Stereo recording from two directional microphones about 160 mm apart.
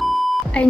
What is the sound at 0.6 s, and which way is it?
Speech, 5° left (ahead or behind).